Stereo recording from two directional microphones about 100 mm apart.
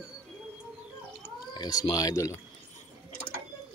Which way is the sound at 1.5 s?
40° left (ahead or behind).